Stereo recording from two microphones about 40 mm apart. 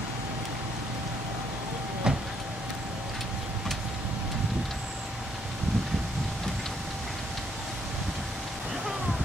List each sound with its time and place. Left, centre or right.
2.1 s printer: centre